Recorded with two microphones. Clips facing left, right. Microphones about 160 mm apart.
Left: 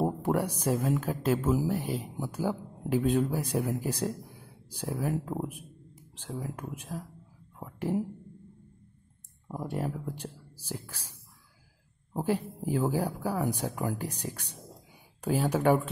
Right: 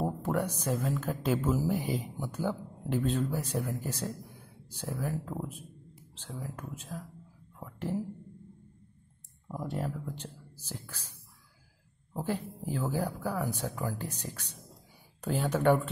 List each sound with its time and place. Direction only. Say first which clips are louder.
0.0 s speech: left 3 dB; 10° left (ahead or behind)
6.7 s speech: left 3 dB; 10° left (ahead or behind)
9.8 s speech: left 5 dB; 10° left (ahead or behind)
12.2 s speech: left 4 dB; 10° left (ahead or behind)